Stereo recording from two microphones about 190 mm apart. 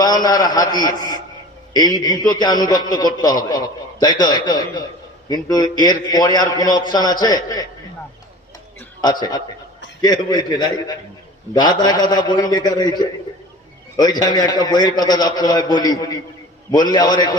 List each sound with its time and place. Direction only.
0.0 s a man's voice: 20° left (ahead or behind)
9.0 s a man's voice: 20° left (ahead or behind)